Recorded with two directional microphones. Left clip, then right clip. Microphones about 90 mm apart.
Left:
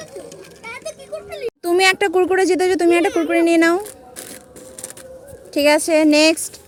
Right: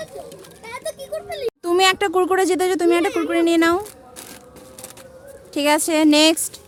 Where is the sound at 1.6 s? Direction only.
20° left (ahead or behind).